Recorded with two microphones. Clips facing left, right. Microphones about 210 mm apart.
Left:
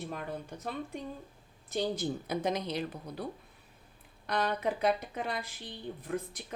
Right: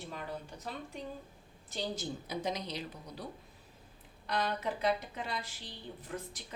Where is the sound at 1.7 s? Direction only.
55° left (ahead or behind).